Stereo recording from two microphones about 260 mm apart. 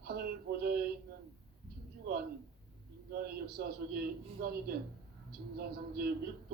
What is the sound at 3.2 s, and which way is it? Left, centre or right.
A man's voice, right.